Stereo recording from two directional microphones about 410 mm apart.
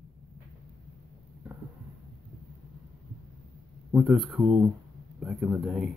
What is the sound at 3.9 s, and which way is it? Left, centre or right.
Speech, centre.